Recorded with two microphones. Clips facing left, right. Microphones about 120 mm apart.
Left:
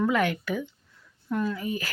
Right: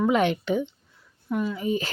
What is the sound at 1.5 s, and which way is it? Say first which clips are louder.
Speech: right 5 dB; 25° right (ahead or behind).